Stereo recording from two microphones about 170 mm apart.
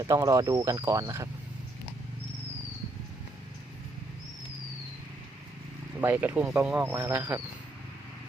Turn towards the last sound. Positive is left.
turn(degrees=-10)  # may be behind; listen again after turning